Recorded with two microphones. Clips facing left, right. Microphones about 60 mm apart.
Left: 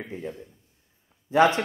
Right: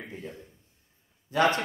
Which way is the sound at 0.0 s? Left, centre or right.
Left.